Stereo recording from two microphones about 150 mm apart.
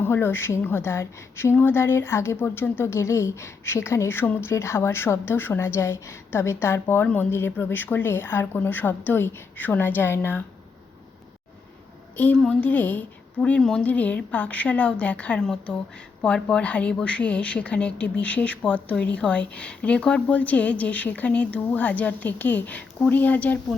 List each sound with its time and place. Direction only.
0.0 s a woman's voice: 15° left (ahead or behind)
12.1 s a woman's voice: 10° left (ahead or behind)